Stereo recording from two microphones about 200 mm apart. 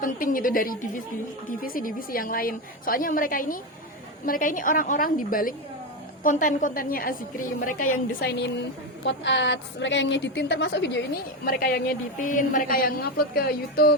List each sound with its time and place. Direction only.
0.0 s a woman's voice: 45° left (ahead or behind); by 11.0 s 60° left (ahead or behind)
11.4 s a woman's voice: 45° left (ahead or behind)